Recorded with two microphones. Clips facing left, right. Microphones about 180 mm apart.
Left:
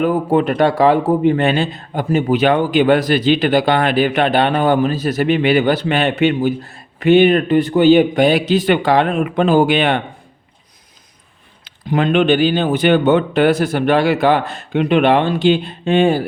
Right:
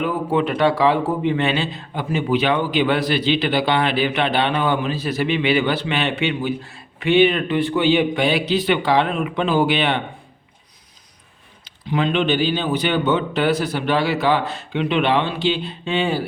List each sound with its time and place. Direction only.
0.0 s speech: 45° left (ahead or behind)
11.6 s speech: 50° left (ahead or behind)